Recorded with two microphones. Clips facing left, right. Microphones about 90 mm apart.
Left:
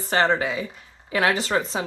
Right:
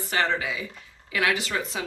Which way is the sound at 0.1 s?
35° left (ahead or behind).